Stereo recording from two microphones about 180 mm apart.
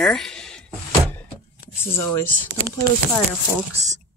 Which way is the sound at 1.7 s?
10° left (ahead or behind).